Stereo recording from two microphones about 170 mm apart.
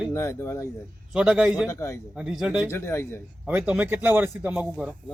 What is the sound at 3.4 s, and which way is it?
Speech, 10° right (ahead or behind).